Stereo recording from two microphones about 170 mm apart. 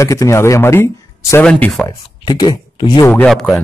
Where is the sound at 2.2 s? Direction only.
25° left (ahead or behind).